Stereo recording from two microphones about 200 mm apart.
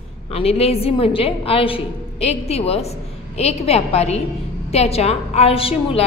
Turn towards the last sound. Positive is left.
turn(degrees=30)  # may be behind; listen again after turning